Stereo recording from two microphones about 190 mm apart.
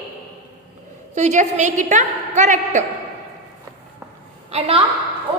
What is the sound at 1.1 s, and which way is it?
A woman's voice, 40° right (ahead or behind).